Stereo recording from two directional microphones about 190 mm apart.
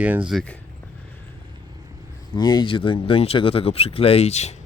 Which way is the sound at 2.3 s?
20° left (ahead or behind).